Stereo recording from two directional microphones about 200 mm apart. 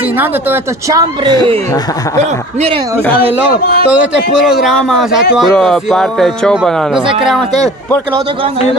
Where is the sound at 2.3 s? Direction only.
30° right (ahead or behind).